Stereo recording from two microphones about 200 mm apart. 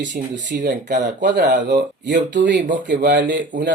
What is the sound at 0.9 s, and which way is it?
Speech, 40° right (ahead or behind).